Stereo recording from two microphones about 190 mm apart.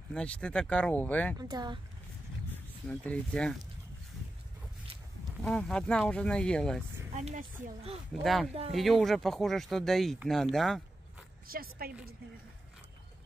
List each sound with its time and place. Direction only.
0.1 s speech: 5° left (ahead or behind)
1.4 s speech: 20° right (ahead or behind)
2.5 s speech: 5° left (ahead or behind)
5.4 s speech: 5° left (ahead or behind)
7.2 s speech: 40° right (ahead or behind)
8.2 s speech: centre (ahead or behind)
11.5 s a woman's voice: 50° right (ahead or behind)